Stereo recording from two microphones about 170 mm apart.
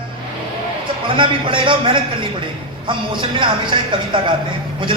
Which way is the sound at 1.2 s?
30° right (ahead or behind).